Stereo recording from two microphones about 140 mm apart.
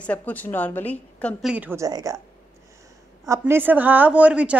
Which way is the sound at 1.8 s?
25° right (ahead or behind).